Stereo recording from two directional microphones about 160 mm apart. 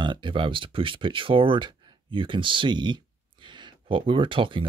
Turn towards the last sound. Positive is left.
turn(degrees=-30)  # may be behind; listen again after turning